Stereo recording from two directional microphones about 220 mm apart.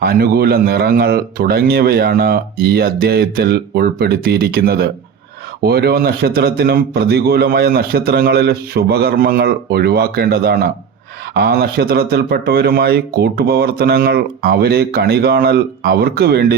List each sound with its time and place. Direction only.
0.0 s speech: 45° right (ahead or behind)